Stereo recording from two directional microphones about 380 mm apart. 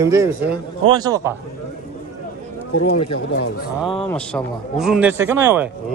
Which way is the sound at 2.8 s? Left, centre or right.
Left.